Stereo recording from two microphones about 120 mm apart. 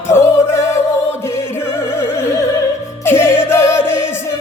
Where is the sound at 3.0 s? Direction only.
20° left (ahead or behind).